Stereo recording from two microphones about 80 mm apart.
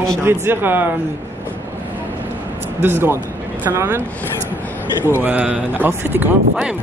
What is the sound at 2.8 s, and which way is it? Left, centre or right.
Speech, right.